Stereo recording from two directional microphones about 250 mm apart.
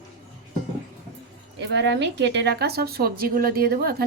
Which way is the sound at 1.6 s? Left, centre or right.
Right.